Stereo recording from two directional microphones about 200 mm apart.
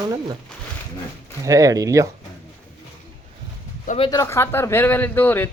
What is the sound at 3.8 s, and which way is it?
Speech, 30° left (ahead or behind).